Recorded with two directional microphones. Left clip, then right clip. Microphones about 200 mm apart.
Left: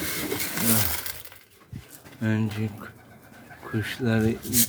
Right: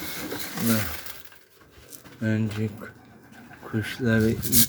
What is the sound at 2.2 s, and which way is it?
Speech, 5° left (ahead or behind).